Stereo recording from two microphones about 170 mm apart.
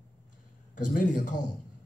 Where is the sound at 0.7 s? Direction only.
50° left (ahead or behind).